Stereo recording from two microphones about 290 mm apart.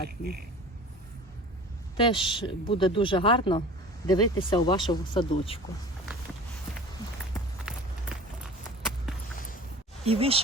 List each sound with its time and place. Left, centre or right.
2.0 s speech: centre
7.7 s walk: centre
10.0 s speech: centre